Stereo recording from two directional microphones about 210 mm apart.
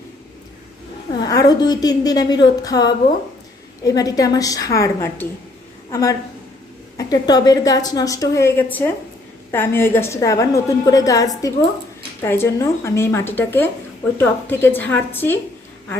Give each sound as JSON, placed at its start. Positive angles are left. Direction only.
{"t": 1.2, "sound": "a woman's voice", "side_deg": 15}